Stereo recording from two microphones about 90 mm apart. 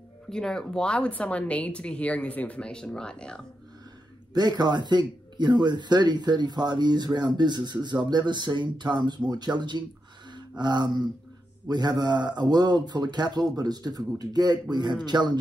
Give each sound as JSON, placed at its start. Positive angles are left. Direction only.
{"t": 0.3, "sound": "speech", "side_deg": 10}
{"t": 4.3, "sound": "speech", "side_deg": -50}